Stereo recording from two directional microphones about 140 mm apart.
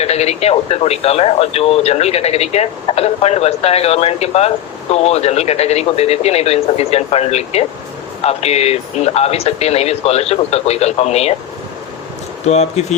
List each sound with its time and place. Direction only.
0.0 s speech: 50° left (ahead or behind)
12.5 s speech: 50° left (ahead or behind)